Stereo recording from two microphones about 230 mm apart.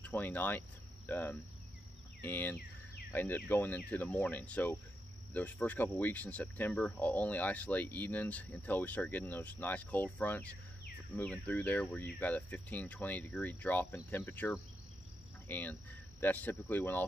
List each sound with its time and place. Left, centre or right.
0.0 s speech: centre